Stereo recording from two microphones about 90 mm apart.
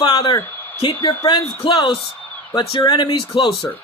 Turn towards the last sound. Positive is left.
turn(degrees=40)  # may be behind; listen again after turning